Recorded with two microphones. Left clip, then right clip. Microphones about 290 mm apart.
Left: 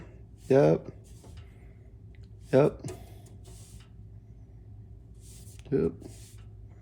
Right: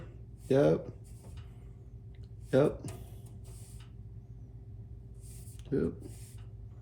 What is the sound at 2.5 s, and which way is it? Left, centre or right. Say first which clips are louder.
Speech: left 4 dB; left.